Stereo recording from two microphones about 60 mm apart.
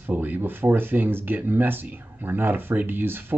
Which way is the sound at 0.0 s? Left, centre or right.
Right.